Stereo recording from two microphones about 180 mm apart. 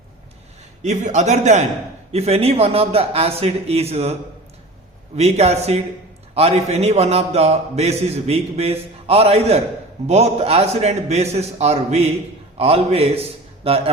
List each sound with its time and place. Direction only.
0.8 s a man's voice: 40° right (ahead or behind)